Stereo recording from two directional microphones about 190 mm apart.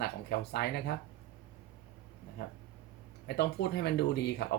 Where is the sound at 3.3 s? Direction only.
60° left (ahead or behind).